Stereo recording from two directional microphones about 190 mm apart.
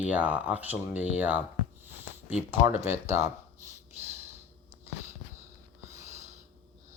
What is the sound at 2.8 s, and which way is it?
Speech, 15° right (ahead or behind).